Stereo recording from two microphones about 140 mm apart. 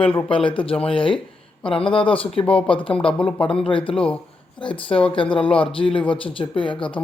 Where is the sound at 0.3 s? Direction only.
40° left (ahead or behind).